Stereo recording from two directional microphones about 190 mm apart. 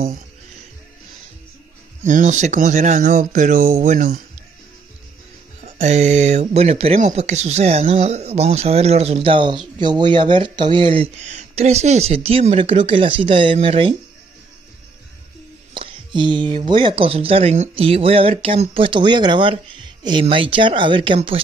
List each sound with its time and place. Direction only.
2.0 s speech: 40° right (ahead or behind)
5.8 s speech: 40° right (ahead or behind)
15.7 s speech: 25° right (ahead or behind)